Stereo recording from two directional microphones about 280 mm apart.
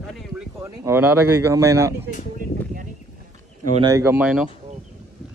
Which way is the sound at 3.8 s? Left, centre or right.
Centre.